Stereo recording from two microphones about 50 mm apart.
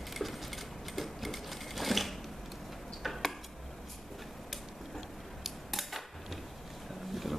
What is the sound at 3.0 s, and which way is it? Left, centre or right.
Tick-tock, centre.